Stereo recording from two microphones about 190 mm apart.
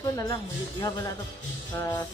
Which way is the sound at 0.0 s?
20° left (ahead or behind).